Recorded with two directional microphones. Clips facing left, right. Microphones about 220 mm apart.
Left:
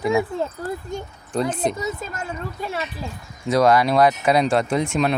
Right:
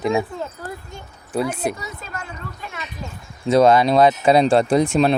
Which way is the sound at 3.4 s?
25° right (ahead or behind).